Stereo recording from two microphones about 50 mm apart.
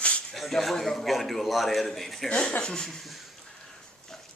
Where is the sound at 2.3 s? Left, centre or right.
Centre.